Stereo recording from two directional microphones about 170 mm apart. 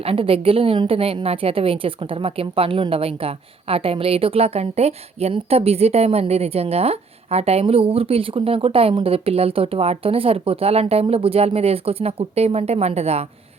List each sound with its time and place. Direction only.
0.0 s a woman's voice: 35° right (ahead or behind)